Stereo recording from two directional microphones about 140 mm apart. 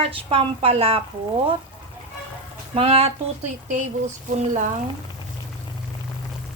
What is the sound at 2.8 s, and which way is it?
Speech, 45° right (ahead or behind).